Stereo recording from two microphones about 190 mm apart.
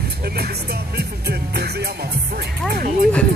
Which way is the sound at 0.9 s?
60° right (ahead or behind).